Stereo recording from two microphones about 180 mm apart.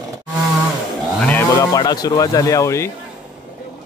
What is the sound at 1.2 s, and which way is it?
Cattle, 10° left (ahead or behind).